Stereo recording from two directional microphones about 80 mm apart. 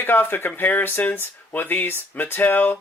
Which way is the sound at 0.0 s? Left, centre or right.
Left.